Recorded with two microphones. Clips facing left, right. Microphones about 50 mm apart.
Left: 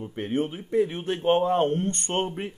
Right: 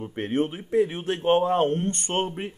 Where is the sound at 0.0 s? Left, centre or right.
Right.